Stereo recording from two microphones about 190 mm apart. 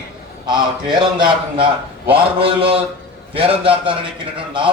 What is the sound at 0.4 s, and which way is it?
A man's voice, 25° right (ahead or behind).